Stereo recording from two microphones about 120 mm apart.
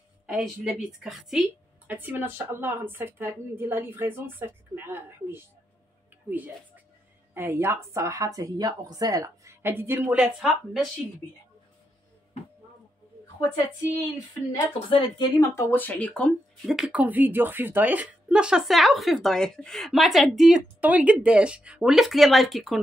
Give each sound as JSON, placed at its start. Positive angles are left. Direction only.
{"t": 0.3, "sound": "a woman's voice", "side_deg": 0}
{"t": 1.9, "sound": "a woman's voice", "side_deg": -15}
{"t": 10.1, "sound": "a woman's voice", "side_deg": -5}
{"t": 14.9, "sound": "a woman's voice", "side_deg": 45}
{"t": 15.3, "sound": "speech", "side_deg": 20}
{"t": 16.6, "sound": "a woman's voice", "side_deg": 0}
{"t": 17.0, "sound": "a woman's voice", "side_deg": -15}